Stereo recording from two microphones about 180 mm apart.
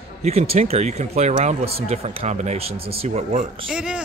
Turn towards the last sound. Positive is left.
turn(degrees=-5)  # may be behind; listen again after turning